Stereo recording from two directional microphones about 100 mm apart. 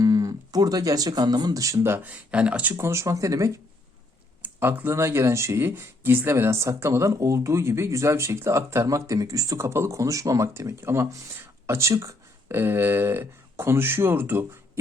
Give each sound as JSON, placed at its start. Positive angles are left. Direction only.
{"t": 0.0, "sound": "speech", "side_deg": -40}
{"t": 2.7, "sound": "speech", "side_deg": -30}
{"t": 4.4, "sound": "speech", "side_deg": -20}